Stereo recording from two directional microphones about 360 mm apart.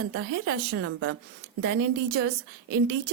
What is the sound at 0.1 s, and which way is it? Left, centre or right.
A woman's voice, right.